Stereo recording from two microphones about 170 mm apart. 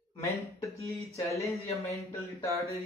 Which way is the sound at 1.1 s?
15° left (ahead or behind).